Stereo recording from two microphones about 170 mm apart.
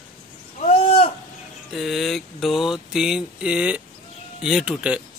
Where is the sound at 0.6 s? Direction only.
40° left (ahead or behind).